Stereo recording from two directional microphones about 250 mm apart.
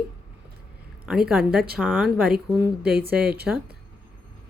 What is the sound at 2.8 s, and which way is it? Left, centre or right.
Speech, right.